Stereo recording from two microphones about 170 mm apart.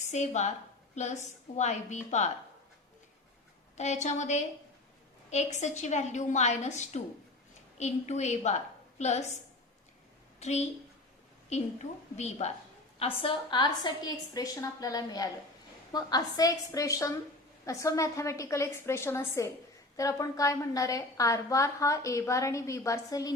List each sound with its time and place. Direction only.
0.1 s a woman's voice: 45° left (ahead or behind)
3.8 s a woman's voice: 45° left (ahead or behind)
10.4 s a woman's voice: 40° left (ahead or behind); by 23.3 s 20° left (ahead or behind)